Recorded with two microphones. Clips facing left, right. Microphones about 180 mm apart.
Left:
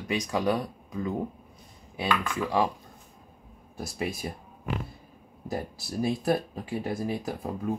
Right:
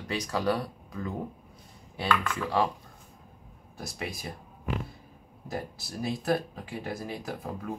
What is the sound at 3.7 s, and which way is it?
Speech, 25° left (ahead or behind).